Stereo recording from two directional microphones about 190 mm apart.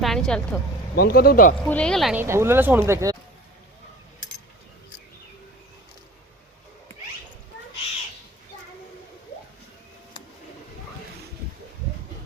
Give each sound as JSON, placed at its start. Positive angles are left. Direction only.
{"t": 0.0, "sound": "speech", "side_deg": 0}
{"t": 0.9, "sound": "a man's voice", "side_deg": 55}
{"t": 1.6, "sound": "speech", "side_deg": 5}
{"t": 2.2, "sound": "speech", "side_deg": -15}